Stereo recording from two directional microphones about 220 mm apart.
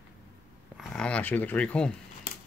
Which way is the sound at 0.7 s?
5° left (ahead or behind).